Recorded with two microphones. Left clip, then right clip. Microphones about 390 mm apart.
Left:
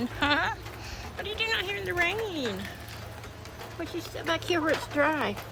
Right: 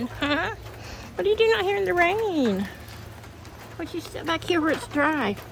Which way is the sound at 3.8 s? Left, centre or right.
Centre.